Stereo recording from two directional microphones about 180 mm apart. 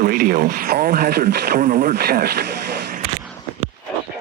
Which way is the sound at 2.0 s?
60° right (ahead or behind).